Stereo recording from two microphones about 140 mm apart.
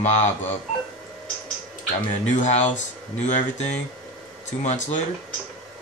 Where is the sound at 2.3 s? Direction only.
55° left (ahead or behind).